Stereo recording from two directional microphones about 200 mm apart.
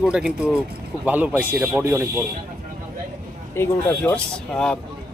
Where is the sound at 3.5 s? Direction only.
10° left (ahead or behind).